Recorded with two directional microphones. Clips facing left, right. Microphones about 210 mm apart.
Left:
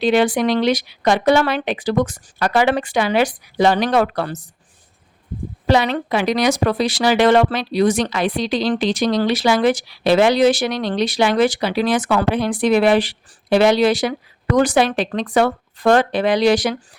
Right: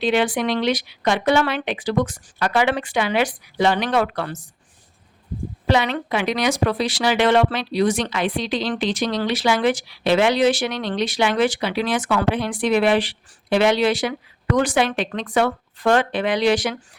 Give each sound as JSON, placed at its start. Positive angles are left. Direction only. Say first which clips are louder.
{"t": 0.0, "sound": "speech", "louder": "left 4 dB", "side_deg": 40}
{"t": 5.6, "sound": "speech", "louder": "left 3 dB", "side_deg": 35}